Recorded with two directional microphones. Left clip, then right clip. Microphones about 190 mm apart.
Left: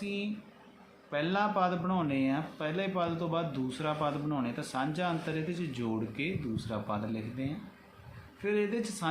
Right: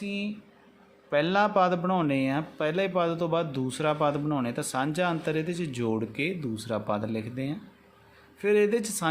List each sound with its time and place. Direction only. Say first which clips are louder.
0.0 s speech: right 3 dB; 55° right (ahead or behind)